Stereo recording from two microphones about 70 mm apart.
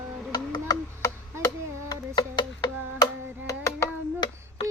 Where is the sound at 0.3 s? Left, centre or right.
Left.